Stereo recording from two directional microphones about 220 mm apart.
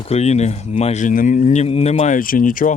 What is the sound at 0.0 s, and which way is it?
Speech, 30° left (ahead or behind).